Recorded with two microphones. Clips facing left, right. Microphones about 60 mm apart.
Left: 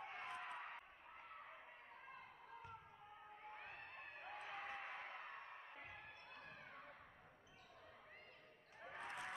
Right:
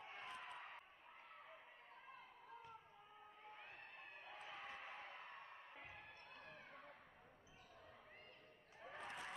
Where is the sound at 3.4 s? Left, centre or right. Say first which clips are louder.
Left 3 dB; left.